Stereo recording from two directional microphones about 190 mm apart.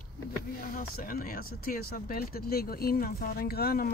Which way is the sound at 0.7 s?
50° left (ahead or behind).